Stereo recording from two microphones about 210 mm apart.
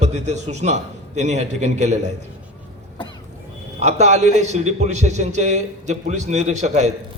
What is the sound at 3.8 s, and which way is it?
A man's voice, 30° right (ahead or behind).